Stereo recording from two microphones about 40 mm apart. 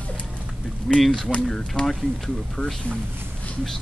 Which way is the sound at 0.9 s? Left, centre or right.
Centre.